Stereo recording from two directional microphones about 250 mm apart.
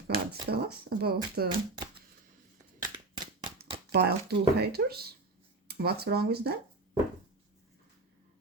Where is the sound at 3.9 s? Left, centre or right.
Right.